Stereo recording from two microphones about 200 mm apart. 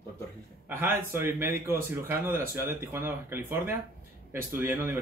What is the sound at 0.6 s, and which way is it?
Speech, 10° right (ahead or behind).